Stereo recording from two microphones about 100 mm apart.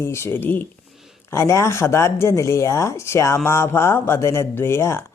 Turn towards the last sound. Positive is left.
turn(degrees=25)  # may be behind; listen again after turning